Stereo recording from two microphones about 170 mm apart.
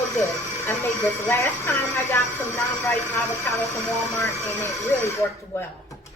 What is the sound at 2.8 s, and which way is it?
Speech, 15° left (ahead or behind).